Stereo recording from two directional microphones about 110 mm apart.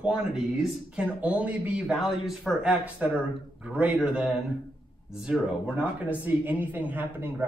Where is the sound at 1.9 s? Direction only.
Centre (ahead or behind).